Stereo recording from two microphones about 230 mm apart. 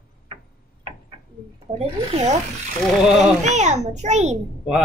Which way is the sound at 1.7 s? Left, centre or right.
Right.